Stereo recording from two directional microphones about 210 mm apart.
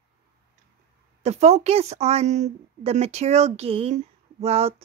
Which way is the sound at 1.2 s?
30° right (ahead or behind).